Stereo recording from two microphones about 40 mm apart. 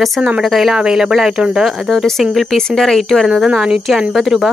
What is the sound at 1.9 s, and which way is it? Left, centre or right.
Speech, centre.